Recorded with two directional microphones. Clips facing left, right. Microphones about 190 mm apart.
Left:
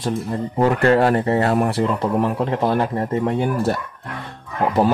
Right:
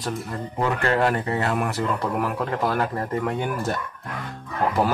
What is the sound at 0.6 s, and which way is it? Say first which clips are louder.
Speech: left 7 dB; 35° left (ahead or behind).